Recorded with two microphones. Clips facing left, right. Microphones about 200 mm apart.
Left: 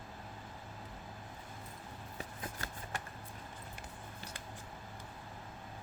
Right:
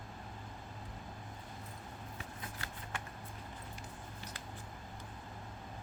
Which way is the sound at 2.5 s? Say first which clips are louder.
Left 1 dB; 45° left (ahead or behind).